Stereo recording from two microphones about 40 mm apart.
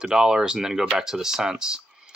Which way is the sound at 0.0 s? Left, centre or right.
Centre.